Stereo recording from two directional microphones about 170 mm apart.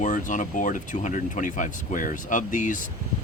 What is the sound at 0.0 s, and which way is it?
Speech, 50° left (ahead or behind).